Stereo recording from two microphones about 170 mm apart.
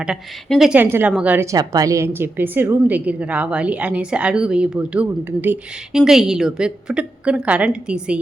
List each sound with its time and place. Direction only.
0.0 s a woman's voice: centre (ahead or behind)